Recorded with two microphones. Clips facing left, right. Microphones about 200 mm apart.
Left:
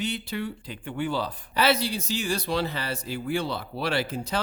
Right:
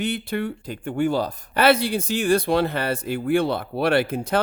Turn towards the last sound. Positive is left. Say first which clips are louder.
# right 7 dB
turn(degrees=-55)  # may be behind; listen again after turning